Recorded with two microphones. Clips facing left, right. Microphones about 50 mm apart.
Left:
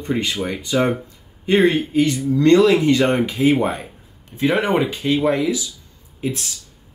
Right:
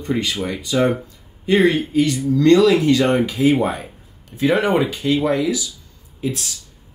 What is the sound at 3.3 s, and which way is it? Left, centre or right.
Speech, left.